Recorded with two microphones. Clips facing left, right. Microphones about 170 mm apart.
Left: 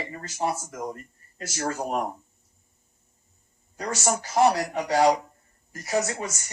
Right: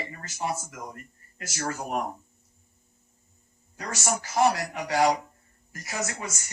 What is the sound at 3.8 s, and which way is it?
Speech, 35° left (ahead or behind).